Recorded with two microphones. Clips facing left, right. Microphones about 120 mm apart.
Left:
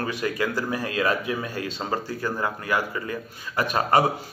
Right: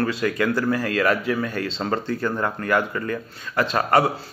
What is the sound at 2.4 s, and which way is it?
Speech, 55° right (ahead or behind).